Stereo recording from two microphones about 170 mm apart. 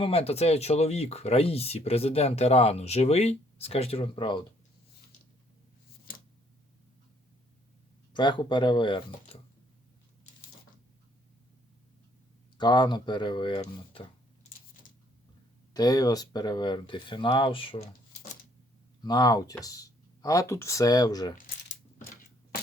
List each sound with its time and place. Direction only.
0.0 s speech: 35° left (ahead or behind)
8.1 s speech: 25° left (ahead or behind)
12.5 s speech: 25° left (ahead or behind)
15.7 s speech: 20° left (ahead or behind)
19.0 s speech: 25° left (ahead or behind)